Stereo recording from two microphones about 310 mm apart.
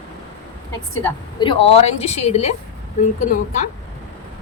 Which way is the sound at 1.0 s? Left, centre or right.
Centre.